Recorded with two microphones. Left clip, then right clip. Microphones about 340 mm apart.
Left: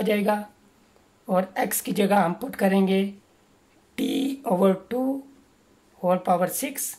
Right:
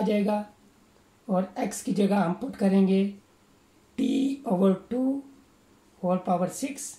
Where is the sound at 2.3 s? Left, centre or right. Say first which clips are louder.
Left 4 dB; left.